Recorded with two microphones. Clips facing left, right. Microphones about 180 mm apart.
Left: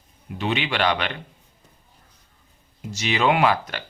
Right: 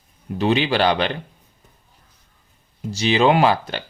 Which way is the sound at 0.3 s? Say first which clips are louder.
Right 6 dB; 35° right (ahead or behind).